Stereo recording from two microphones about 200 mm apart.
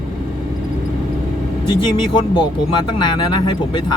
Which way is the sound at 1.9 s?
25° left (ahead or behind).